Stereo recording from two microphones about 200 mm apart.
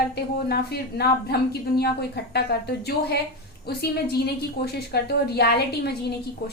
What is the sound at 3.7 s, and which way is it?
A woman's voice, 55° left (ahead or behind).